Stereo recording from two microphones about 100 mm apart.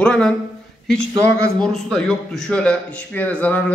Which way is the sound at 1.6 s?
5° left (ahead or behind).